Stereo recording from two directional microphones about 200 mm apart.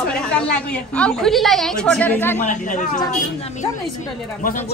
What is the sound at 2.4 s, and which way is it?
Speech, 40° left (ahead or behind).